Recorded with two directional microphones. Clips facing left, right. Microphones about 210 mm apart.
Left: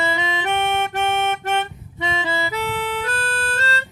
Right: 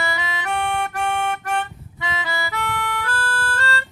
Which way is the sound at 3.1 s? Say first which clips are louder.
Left 1 dB; 25° left (ahead or behind).